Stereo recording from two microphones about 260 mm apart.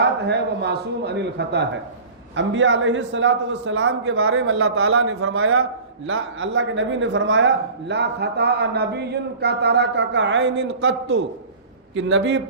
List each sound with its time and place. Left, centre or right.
0.0 s a man's voice: right